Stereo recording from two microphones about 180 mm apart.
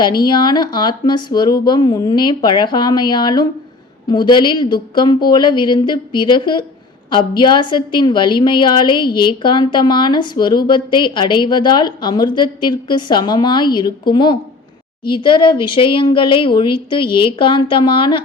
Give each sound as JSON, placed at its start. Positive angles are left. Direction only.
{"t": 0.0, "sound": "a woman's voice", "side_deg": 25}